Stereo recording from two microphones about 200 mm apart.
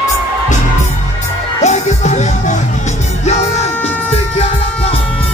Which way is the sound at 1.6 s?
35° left (ahead or behind).